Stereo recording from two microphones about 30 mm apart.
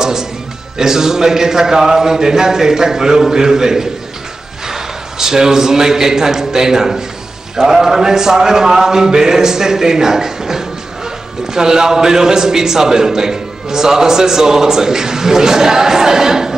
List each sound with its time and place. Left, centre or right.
0.0 s music: centre
0.7 s a man's voice: centre